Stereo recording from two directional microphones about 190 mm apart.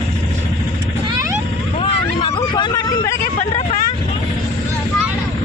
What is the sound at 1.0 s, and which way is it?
Vehicle, 20° right (ahead or behind).